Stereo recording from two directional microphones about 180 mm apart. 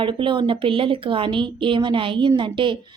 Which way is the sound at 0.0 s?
30° right (ahead or behind).